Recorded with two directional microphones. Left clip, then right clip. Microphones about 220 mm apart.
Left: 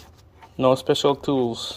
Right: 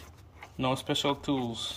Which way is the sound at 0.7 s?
25° left (ahead or behind).